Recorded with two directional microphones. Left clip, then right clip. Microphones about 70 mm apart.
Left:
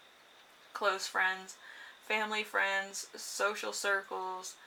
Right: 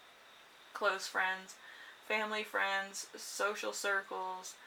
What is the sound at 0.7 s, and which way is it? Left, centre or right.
Speech, left.